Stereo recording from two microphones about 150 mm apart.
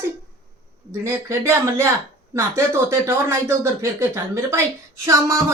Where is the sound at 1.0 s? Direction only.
20° right (ahead or behind).